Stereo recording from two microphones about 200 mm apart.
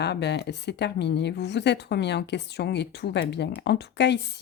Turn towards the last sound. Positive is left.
turn(degrees=60)  # may be behind; listen again after turning